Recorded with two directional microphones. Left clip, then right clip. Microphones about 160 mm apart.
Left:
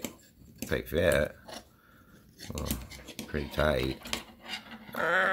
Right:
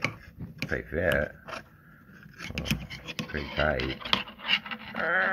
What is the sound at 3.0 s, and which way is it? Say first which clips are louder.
Music: right 7 dB; 5° right (ahead or behind).